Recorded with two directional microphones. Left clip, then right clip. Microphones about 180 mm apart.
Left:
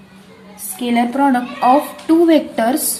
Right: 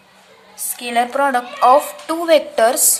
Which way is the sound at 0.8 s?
35° right (ahead or behind).